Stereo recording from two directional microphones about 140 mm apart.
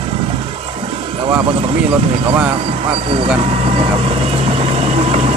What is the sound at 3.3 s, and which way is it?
Vehicle, 45° right (ahead or behind).